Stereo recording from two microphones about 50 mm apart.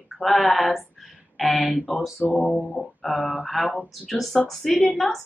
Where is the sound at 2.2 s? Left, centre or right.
Left.